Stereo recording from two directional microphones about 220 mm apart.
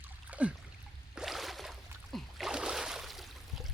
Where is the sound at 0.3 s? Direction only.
5° right (ahead or behind).